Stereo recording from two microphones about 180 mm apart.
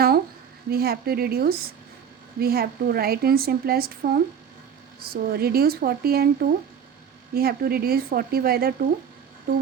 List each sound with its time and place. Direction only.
0.7 s a woman's voice: 60° right (ahead or behind)